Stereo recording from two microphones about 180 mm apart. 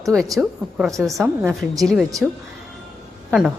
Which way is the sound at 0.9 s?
15° right (ahead or behind).